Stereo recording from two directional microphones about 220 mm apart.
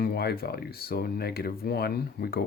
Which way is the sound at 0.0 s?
45° left (ahead or behind).